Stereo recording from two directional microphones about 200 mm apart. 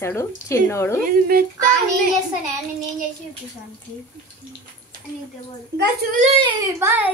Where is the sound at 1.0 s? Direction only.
45° right (ahead or behind).